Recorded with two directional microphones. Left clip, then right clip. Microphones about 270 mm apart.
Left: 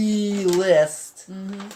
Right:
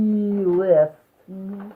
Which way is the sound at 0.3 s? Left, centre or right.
Centre.